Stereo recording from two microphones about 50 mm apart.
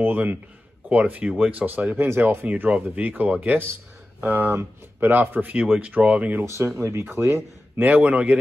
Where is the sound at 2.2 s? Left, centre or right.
Right.